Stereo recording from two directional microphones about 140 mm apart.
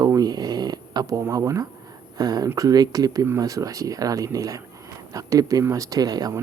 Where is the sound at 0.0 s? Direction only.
25° right (ahead or behind).